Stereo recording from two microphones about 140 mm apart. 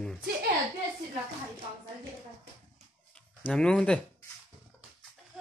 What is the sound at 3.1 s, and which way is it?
Speech, 5° left (ahead or behind).